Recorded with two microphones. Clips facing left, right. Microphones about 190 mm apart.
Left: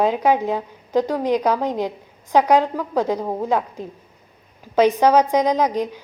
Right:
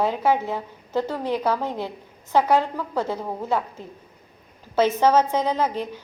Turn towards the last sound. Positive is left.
turn(degrees=15)  # may be behind; listen again after turning